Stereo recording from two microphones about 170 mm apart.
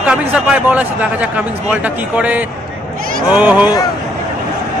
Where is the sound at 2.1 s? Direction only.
10° right (ahead or behind).